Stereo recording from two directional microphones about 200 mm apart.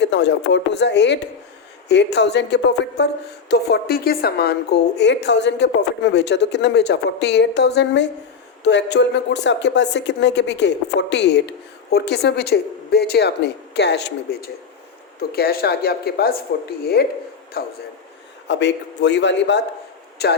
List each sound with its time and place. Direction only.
0.0 s speech: 60° left (ahead or behind)